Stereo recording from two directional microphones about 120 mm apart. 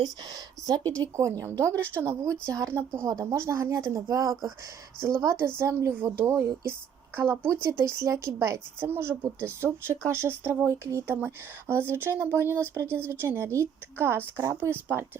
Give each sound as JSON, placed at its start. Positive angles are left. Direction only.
{"t": 0.9, "sound": "speech", "side_deg": -25}